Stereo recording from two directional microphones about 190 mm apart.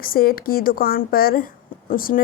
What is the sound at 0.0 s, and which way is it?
A woman's voice, 50° left (ahead or behind).